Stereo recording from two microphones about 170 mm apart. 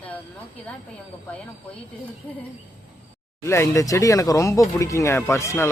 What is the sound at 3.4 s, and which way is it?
Speech, 15° left (ahead or behind).